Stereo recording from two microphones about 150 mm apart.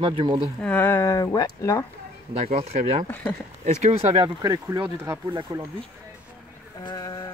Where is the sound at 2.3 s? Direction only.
45° right (ahead or behind).